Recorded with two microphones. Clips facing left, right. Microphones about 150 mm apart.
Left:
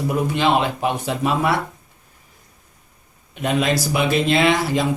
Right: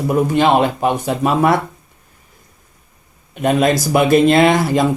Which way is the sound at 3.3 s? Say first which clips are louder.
Right 6 dB; 50° right (ahead or behind).